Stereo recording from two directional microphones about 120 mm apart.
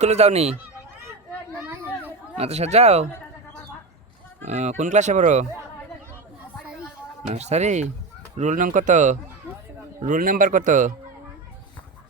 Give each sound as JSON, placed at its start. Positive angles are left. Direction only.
{"t": 0.0, "sound": "speech", "side_deg": -65}
{"t": 1.5, "sound": "a sound", "side_deg": -15}
{"t": 2.4, "sound": "speech", "side_deg": -65}
{"t": 4.4, "sound": "speech", "side_deg": -70}
{"t": 7.3, "sound": "speech", "side_deg": -65}
{"t": 8.4, "sound": "speech", "side_deg": -85}